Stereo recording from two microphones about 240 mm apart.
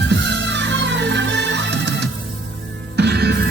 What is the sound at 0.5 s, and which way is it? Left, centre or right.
Music, right.